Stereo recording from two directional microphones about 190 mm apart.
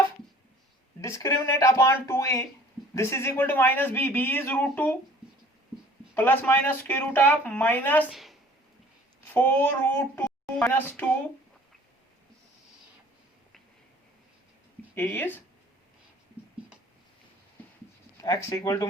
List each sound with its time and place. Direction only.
1.0 s a man's voice: 15° left (ahead or behind)
6.1 s a man's voice: 10° left (ahead or behind)
8.1 s a woman's voice: centre (ahead or behind)
9.2 s speech: 10° left (ahead or behind)
14.9 s a man's voice: 10° left (ahead or behind)
18.2 s a man's voice: 20° left (ahead or behind)